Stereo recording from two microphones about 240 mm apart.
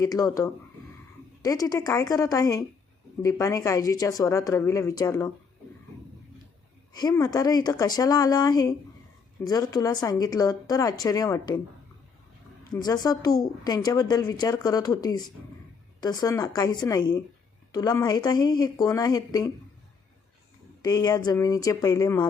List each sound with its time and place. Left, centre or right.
0.0 s speech: centre
6.9 s speech: centre
12.7 s speech: centre
20.8 s speech: centre